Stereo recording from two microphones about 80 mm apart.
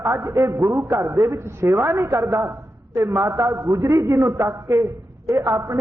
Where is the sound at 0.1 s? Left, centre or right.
Right.